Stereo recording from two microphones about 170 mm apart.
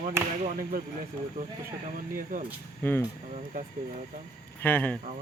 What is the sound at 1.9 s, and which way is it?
Speech, 55° right (ahead or behind).